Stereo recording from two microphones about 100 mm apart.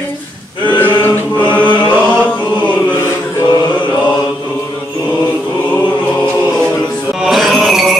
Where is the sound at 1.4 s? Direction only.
15° left (ahead or behind).